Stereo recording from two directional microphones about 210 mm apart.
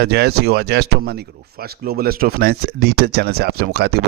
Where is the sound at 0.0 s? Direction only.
50° right (ahead or behind).